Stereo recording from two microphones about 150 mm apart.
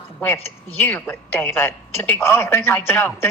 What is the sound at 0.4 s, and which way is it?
A woman's voice, 15° left (ahead or behind).